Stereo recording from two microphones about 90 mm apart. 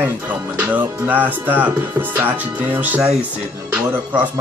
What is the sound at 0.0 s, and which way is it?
Speech, 20° right (ahead or behind).